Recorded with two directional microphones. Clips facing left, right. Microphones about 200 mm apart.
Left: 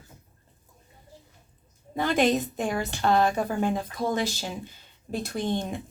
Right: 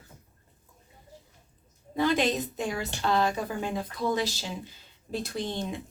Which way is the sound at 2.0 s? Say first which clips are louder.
Left 2 dB; 55° left (ahead or behind).